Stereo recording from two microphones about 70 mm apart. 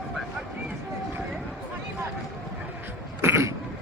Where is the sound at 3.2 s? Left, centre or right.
Right.